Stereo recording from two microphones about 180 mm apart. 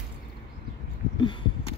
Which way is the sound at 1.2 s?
25° left (ahead or behind).